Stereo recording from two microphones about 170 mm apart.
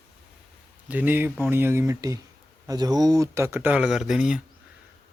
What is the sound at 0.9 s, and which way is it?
Speech, 10° right (ahead or behind).